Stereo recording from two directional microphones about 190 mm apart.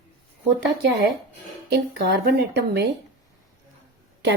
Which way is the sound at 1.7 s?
60° right (ahead or behind).